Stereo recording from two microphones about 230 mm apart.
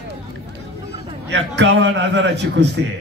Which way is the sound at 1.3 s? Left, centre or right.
Right.